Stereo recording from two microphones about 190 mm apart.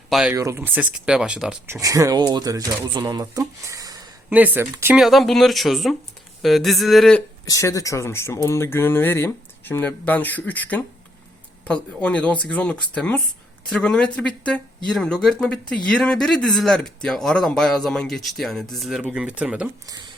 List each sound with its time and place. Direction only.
0.1 s speech: 5° right (ahead or behind)
0.3 s speech: 15° right (ahead or behind)
1.7 s speech: 15° right (ahead or behind)
4.3 s speech: 10° right (ahead or behind)
4.9 s speech: centre (ahead or behind)
7.4 s speech: 15° left (ahead or behind); by 19.6 s 5° right (ahead or behind)